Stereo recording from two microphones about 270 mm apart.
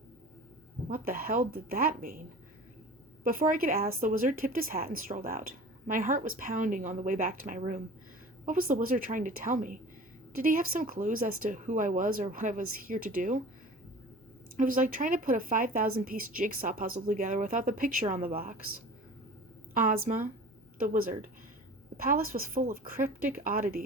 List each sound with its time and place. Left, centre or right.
0.9 s speech: right
3.2 s speech: right
14.5 s speech: right
19.7 s speech: right